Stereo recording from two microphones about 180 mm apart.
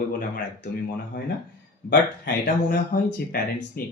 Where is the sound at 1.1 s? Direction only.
75° left (ahead or behind).